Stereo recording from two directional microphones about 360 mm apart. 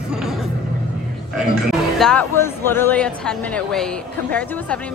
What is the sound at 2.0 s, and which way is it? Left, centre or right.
Speech, centre.